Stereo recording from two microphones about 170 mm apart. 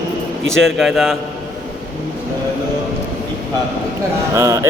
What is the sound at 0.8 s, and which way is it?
Mantra, centre (ahead or behind).